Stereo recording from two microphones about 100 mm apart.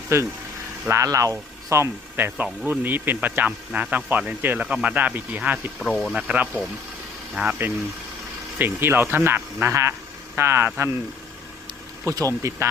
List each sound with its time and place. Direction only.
0.1 s speech: 25° right (ahead or behind)
5.9 s speech: 5° left (ahead or behind)
6.1 s speech: 10° right (ahead or behind)
8.5 s speech: 20° right (ahead or behind)
12.0 s speech: 30° right (ahead or behind)